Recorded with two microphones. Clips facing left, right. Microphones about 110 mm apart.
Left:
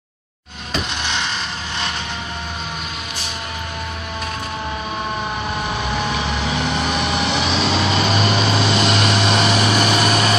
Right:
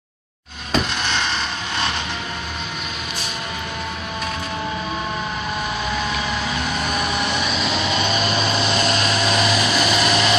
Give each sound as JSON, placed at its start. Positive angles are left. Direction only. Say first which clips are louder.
{"t": 6.5, "sound": "vehicle", "louder": "left 3 dB", "side_deg": 70}